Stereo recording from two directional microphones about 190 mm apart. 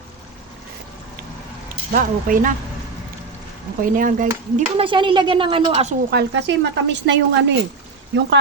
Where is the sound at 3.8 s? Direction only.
45° right (ahead or behind).